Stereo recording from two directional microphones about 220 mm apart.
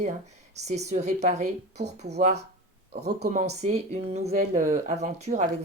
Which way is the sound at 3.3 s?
35° right (ahead or behind).